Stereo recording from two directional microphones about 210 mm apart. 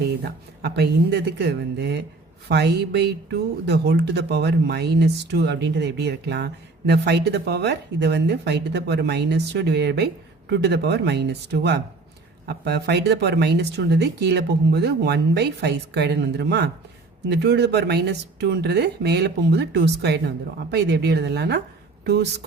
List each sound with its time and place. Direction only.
0.2 s a woman's voice: 50° right (ahead or behind)